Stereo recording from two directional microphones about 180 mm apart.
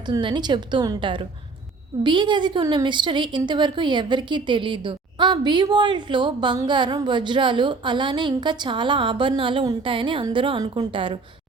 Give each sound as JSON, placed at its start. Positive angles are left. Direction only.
{"t": 0.1, "sound": "a woman's voice", "side_deg": -25}